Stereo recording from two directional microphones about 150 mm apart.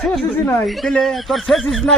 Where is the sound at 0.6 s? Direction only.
Centre (ahead or behind).